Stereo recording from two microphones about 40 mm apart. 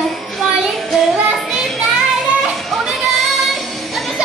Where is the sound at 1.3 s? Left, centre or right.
Centre.